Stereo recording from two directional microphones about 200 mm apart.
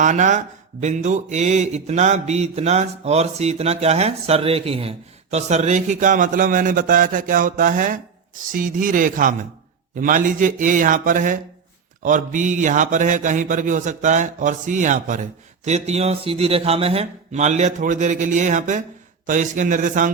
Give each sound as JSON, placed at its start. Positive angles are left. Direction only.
{"t": 0.0, "sound": "mantra", "side_deg": -40}
{"t": 8.4, "sound": "speech", "side_deg": -40}
{"t": 9.9, "sound": "mantra", "side_deg": -40}